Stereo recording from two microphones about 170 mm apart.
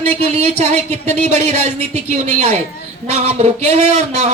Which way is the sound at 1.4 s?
45° right (ahead or behind).